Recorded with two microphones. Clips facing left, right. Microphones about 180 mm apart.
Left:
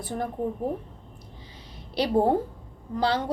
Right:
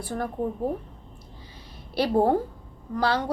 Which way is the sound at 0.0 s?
20° left (ahead or behind).